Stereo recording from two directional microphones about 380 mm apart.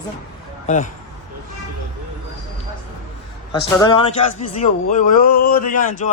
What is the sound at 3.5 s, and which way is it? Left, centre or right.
A man's voice, centre.